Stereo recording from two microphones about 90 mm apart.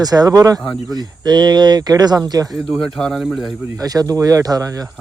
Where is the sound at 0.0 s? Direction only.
45° right (ahead or behind).